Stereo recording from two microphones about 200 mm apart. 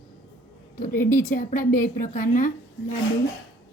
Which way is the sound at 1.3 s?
40° left (ahead or behind).